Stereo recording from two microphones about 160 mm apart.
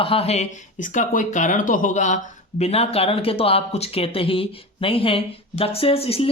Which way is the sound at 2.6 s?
40° left (ahead or behind).